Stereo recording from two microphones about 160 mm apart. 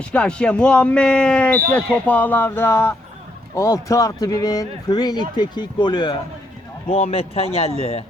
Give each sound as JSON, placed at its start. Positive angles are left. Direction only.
{"t": 0.0, "sound": "speech", "side_deg": 5}